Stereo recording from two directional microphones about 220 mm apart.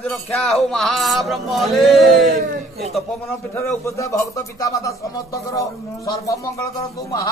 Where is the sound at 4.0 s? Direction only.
15° left (ahead or behind).